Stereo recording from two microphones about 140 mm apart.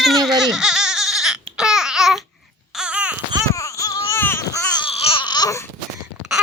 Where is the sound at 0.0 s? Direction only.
Centre (ahead or behind).